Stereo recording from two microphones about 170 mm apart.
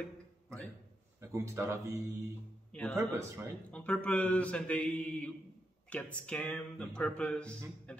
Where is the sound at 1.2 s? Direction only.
15° right (ahead or behind).